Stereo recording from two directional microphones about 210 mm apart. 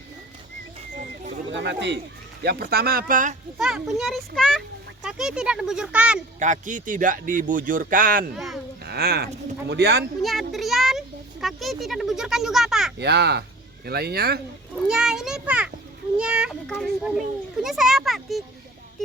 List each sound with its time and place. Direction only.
1.5 s speech: 60° right (ahead or behind); by 3.3 s 40° right (ahead or behind)
3.6 s a child's voice: centre (ahead or behind)
6.4 s speech: 35° right (ahead or behind); by 10.0 s 55° right (ahead or behind)
10.2 s a child's voice: centre (ahead or behind)
13.0 s speech: 50° right (ahead or behind)
14.8 s a sound: 5° right (ahead or behind)
16.1 s a child's voice: 5° right (ahead or behind)